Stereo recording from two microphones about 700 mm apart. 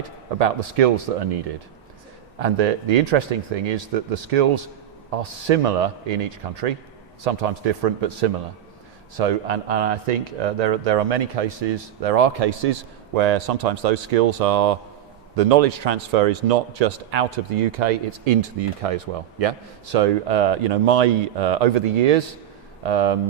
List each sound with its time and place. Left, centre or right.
0.3 s a man's voice: right
2.4 s a man's voice: right
18.9 s a man's voice: right